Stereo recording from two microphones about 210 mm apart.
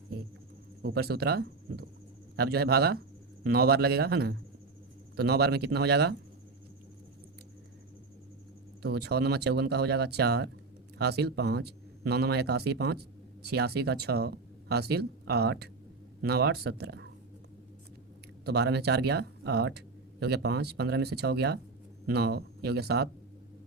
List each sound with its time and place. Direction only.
0.8 s speech: 50° right (ahead or behind)
8.8 s speech: 50° right (ahead or behind)
18.4 s speech: 50° right (ahead or behind)